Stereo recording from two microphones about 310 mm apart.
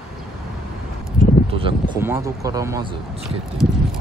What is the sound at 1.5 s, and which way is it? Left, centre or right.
Speech, centre.